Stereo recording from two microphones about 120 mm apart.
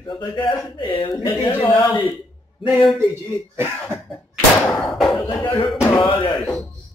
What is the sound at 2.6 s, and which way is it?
Speech, centre (ahead or behind).